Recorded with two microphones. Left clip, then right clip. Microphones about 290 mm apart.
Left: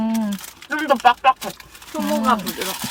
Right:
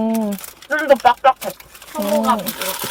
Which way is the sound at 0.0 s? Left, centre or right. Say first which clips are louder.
Right 4 dB; left.